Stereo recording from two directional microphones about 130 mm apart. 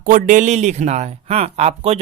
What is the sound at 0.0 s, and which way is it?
Speech, 90° right.